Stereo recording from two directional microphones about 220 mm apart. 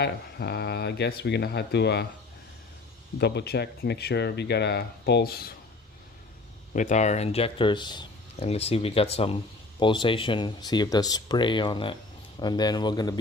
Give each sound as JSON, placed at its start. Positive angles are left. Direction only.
{"t": 0.0, "sound": "speech", "side_deg": 50}
{"t": 3.2, "sound": "speech", "side_deg": 50}
{"t": 6.7, "sound": "speech", "side_deg": 35}